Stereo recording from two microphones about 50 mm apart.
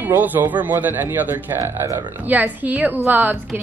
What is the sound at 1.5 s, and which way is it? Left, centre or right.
Speech, right.